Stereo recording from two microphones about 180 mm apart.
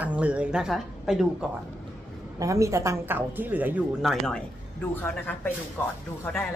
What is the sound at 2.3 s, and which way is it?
Speech, 15° right (ahead or behind).